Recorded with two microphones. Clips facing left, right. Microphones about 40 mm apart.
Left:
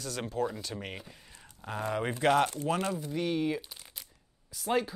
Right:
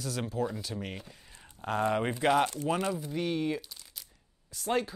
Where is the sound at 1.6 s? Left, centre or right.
Right.